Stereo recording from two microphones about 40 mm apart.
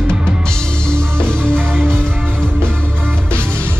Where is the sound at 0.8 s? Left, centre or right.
Left.